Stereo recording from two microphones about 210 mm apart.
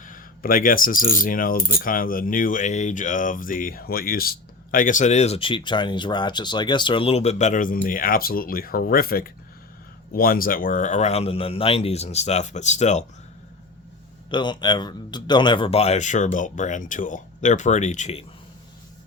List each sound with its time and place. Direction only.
0.0 s speech: 40° left (ahead or behind)
14.3 s speech: 20° left (ahead or behind)